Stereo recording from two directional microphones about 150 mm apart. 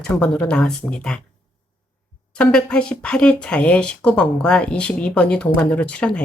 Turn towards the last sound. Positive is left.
turn(degrees=5)  # may be behind; listen again after turning